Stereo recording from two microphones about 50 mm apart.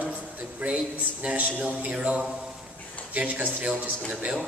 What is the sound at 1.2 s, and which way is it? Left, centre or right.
A man's voice, right.